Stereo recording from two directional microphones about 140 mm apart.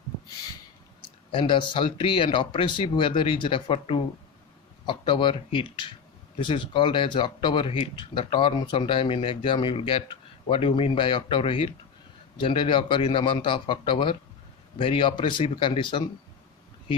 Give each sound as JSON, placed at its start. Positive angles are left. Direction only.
{"t": 1.3, "sound": "speech", "side_deg": 40}